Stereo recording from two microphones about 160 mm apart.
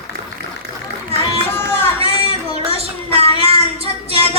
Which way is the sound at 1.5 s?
15° left (ahead or behind).